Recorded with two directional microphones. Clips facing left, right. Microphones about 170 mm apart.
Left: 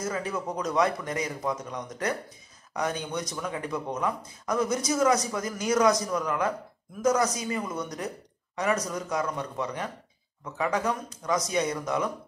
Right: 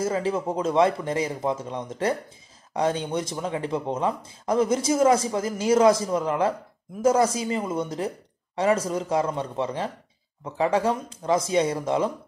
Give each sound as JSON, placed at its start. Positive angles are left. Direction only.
{"t": 0.0, "sound": "speech", "side_deg": -30}